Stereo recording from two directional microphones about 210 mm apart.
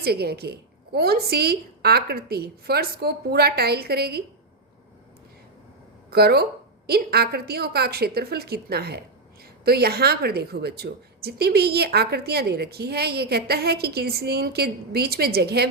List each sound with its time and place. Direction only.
0.0 s a woman's voice: 50° right (ahead or behind)
6.1 s a woman's voice: 50° right (ahead or behind)